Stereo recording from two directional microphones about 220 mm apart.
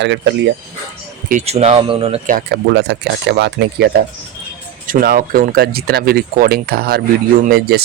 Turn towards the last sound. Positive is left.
turn(degrees=-45)  # may be behind; listen again after turning